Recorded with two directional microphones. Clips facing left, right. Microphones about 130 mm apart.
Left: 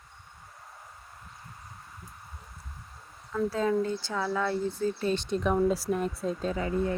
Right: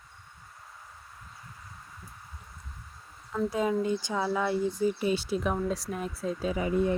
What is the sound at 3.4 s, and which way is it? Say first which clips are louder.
Speech: even; 15° right (ahead or behind).